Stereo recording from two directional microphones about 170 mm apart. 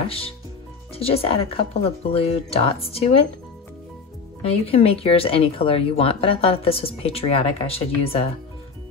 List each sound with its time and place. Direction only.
0.0 s speech: 35° left (ahead or behind)
4.6 s speech: 35° left (ahead or behind)